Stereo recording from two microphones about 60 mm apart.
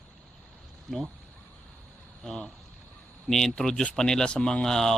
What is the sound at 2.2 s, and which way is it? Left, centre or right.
Speech, centre.